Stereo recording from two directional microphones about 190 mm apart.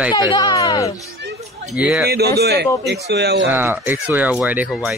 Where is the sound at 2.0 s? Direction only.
60° right (ahead or behind).